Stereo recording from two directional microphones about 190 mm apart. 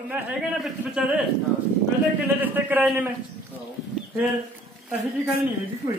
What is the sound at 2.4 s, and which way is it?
Speech, 10° right (ahead or behind).